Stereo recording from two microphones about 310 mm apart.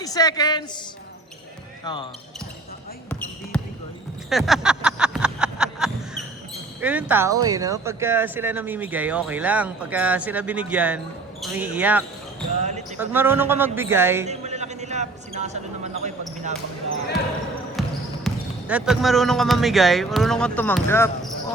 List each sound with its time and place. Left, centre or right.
0.0 s a man's voice: centre
1.8 s speech: centre
3.1 s basketball bounce: centre
4.3 s a sound: centre
6.8 s a man's voice: centre
14.3 s a sound: right
17.8 s basketball bounce: centre
18.7 s speech: centre